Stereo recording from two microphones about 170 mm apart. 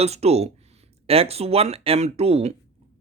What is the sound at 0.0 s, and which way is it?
Speech, 40° right (ahead or behind).